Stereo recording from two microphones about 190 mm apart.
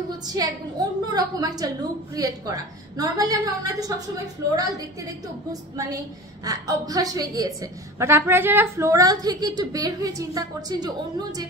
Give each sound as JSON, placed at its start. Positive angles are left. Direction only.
{"t": 0.3, "sound": "a woman's voice", "side_deg": -20}